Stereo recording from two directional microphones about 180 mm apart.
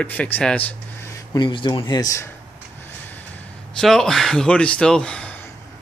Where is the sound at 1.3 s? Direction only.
25° left (ahead or behind).